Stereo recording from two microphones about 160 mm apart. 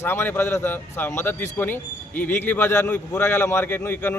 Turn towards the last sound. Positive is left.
turn(degrees=15)  # may be behind; listen again after turning